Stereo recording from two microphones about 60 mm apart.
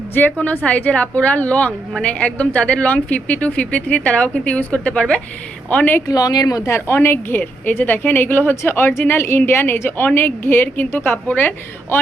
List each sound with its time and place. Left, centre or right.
0.1 s a woman's voice: left
6.1 s speech: left
6.7 s a woman's voice: left